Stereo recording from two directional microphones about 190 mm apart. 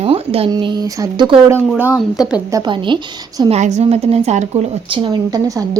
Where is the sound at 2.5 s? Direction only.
25° right (ahead or behind).